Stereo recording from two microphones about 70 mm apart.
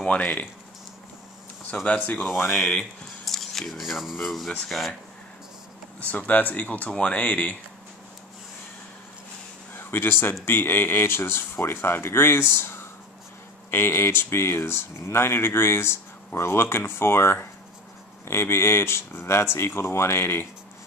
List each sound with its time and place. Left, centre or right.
0.0 s speech: centre
1.9 s speech: left
2.8 s speech: centre
5.9 s speech: left
9.8 s a man's voice: left